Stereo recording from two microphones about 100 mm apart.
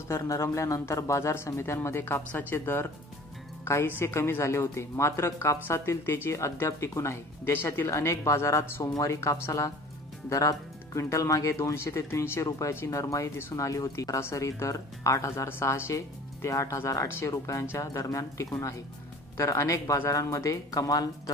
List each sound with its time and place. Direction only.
0.1 s speech: 30° left (ahead or behind)